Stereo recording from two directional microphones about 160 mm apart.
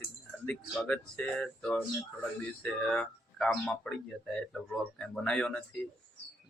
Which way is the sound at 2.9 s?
5° left (ahead or behind).